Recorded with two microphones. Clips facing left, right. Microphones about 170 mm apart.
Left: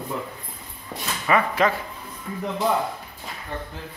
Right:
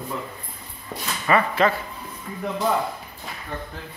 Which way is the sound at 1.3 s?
10° left (ahead or behind).